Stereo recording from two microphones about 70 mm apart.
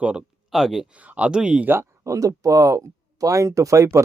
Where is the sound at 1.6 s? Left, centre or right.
Right.